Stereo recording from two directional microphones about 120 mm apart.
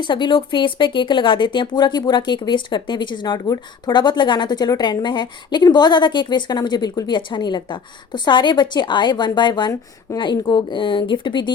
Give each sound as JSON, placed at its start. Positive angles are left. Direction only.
{"t": 0.0, "sound": "speech", "side_deg": 40}